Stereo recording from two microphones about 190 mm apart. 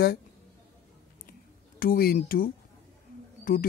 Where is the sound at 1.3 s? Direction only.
50° left (ahead or behind).